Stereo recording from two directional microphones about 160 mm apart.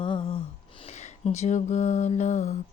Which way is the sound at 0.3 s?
45° left (ahead or behind).